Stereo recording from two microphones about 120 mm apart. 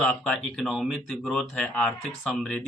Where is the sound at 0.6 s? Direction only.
Centre (ahead or behind).